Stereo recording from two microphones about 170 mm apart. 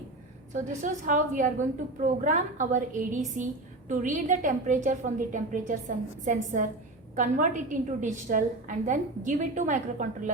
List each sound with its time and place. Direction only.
0.5 s a woman's voice: 50° right (ahead or behind)